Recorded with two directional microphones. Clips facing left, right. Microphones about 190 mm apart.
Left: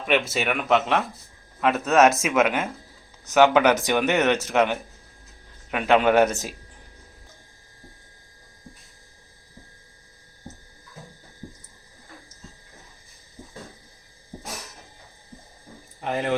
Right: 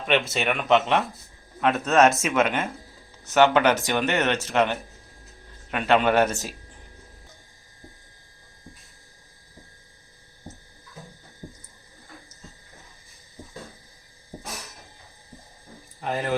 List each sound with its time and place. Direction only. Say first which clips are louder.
0.0 s speech: even; 5° left (ahead or behind)
16.0 s speech: left 2 dB; 20° left (ahead or behind)